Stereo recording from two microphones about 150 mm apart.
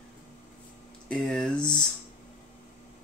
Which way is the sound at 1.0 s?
5° left (ahead or behind).